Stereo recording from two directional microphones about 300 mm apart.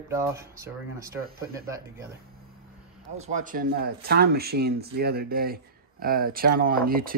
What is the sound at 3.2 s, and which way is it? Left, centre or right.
Speech, right.